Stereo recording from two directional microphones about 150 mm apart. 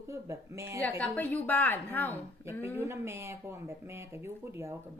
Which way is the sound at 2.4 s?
15° right (ahead or behind).